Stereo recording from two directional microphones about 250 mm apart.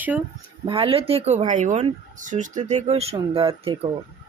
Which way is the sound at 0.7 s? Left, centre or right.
Right.